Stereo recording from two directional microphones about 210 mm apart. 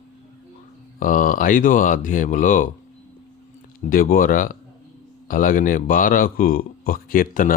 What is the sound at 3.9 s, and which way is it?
Speech, 45° left (ahead or behind).